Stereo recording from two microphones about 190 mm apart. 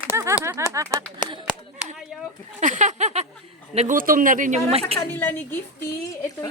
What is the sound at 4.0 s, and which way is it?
Speech, 45° right (ahead or behind).